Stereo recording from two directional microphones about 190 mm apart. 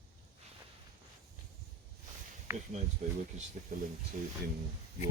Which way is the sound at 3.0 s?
40° right (ahead or behind).